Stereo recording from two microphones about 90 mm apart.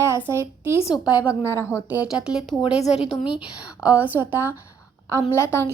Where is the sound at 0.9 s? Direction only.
50° left (ahead or behind).